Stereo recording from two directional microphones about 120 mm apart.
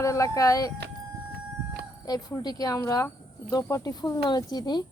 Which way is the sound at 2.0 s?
35° left (ahead or behind).